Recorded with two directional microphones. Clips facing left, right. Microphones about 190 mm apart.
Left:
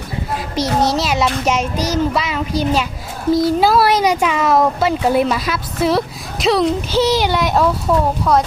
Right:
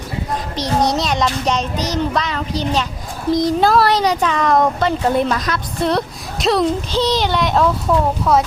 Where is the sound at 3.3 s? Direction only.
5° left (ahead or behind).